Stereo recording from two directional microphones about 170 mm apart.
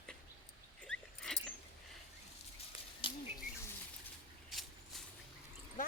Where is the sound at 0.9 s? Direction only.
5° left (ahead or behind).